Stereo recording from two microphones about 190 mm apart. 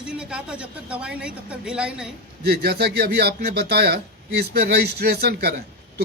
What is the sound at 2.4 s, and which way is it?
Speech, 55° right (ahead or behind).